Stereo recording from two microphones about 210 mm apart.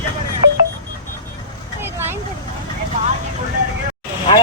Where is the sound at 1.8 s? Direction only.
10° right (ahead or behind).